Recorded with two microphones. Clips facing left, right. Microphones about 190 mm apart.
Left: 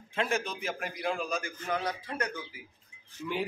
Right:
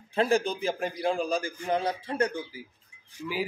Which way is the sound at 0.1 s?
35° right (ahead or behind).